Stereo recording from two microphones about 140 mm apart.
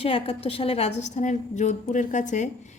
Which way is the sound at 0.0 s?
45° left (ahead or behind).